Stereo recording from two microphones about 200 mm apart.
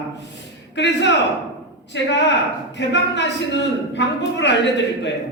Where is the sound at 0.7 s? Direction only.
60° left (ahead or behind).